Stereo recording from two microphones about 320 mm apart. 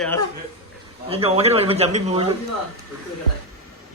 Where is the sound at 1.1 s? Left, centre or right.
Centre.